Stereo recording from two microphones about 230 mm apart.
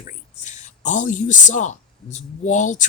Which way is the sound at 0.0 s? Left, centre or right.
Left.